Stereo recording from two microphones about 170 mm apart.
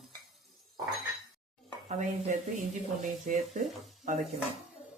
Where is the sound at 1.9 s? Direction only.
45° right (ahead or behind).